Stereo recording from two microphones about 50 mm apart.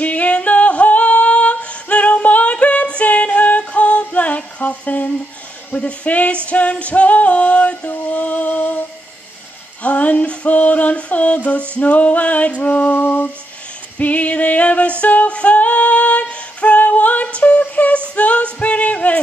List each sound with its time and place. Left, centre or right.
0.0 s female singing: left
5.8 s music: left
9.8 s music: left
13.9 s female singing: left
18.1 s singing: left